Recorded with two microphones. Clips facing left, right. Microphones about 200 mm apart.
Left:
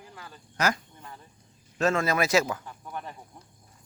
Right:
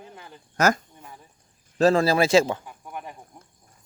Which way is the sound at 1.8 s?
35° right (ahead or behind).